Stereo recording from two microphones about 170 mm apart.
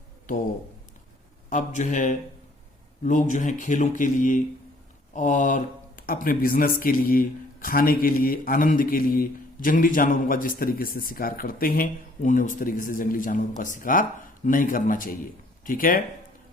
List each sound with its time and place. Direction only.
0.3 s speech: 55° left (ahead or behind)
1.5 s speech: 45° left (ahead or behind)